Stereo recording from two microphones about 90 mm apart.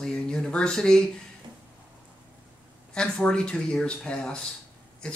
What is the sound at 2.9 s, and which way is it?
Speech, 10° left (ahead or behind).